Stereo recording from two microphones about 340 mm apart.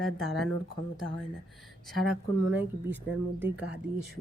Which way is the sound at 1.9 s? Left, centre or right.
Centre.